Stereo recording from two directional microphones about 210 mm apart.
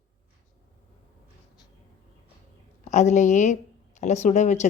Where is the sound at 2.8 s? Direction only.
35° left (ahead or behind).